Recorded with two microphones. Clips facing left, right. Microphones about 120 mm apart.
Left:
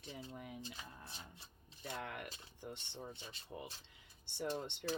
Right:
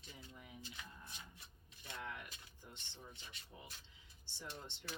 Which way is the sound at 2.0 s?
60° left (ahead or behind).